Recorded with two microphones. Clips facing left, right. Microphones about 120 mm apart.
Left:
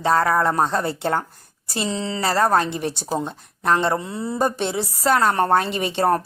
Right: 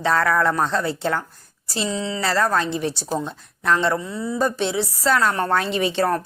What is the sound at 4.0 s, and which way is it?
A woman's voice, 55° left (ahead or behind).